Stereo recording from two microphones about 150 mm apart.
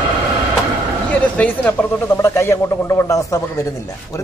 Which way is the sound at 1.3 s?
10° left (ahead or behind).